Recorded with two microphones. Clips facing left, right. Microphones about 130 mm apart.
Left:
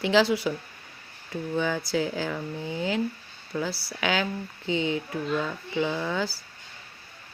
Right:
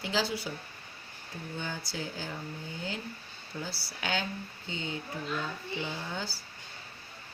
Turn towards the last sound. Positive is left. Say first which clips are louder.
# left 9 dB
turn(degrees=90)